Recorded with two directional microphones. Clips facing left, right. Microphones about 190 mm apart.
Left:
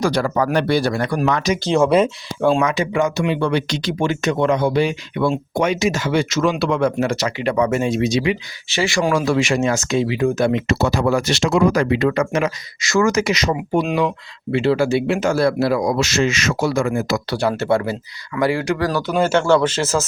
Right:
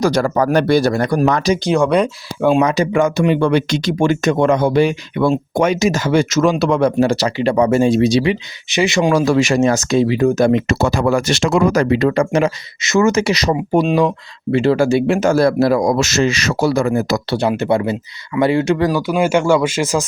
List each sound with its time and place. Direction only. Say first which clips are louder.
0.0 s speech: right 3 dB; 45° right (ahead or behind)
1.7 s speech: left 1 dB; 5° left (ahead or behind)
2.6 s speech: right 4 dB; 40° right (ahead or behind)
8.7 s speech: right 4 dB; 20° right (ahead or behind)
9.1 s speech: right 5 dB; 40° right (ahead or behind)
17.3 s speech: right 2 dB; 20° right (ahead or behind)